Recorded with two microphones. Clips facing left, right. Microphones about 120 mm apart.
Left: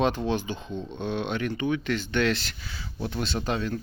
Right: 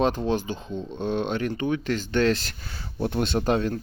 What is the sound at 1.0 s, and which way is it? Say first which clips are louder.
Speech: right 3 dB; 40° right (ahead or behind).